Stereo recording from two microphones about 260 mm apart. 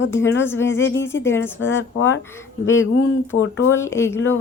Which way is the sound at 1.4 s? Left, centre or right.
Left.